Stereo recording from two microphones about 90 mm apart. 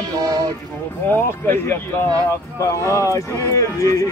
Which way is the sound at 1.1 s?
20° left (ahead or behind).